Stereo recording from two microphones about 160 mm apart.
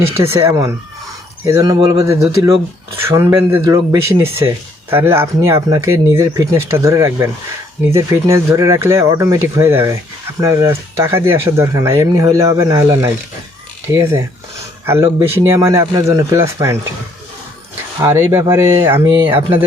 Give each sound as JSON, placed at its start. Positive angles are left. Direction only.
{"t": 0.3, "sound": "speech", "side_deg": -20}
{"t": 18.0, "sound": "speech", "side_deg": -20}
{"t": 19.0, "sound": "speech", "side_deg": -30}